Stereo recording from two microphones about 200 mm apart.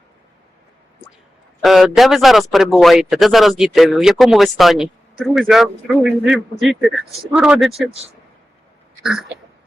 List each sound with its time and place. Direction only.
1.6 s speech: centre (ahead or behind)
7.7 s speech: 30° right (ahead or behind)